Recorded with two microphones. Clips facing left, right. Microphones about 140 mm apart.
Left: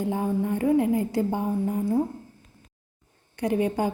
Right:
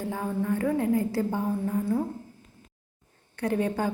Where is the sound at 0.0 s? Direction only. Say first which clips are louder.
Left 4 dB; 20° left (ahead or behind).